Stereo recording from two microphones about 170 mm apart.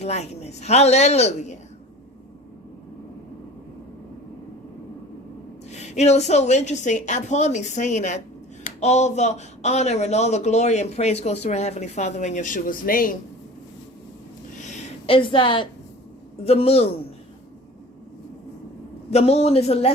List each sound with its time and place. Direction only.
0.0 s speech: 40° left (ahead or behind)
5.7 s a woman's voice: 40° left (ahead or behind)
14.6 s a sound: 40° left (ahead or behind)
16.4 s speech: 35° left (ahead or behind)
19.1 s speech: 35° left (ahead or behind)